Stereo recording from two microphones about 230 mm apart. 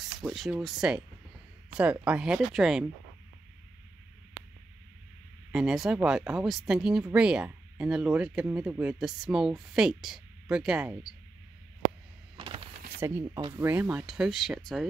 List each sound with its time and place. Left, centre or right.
0.2 s speech: centre
5.5 s speech: centre
12.4 s a sound: right
13.0 s speech: centre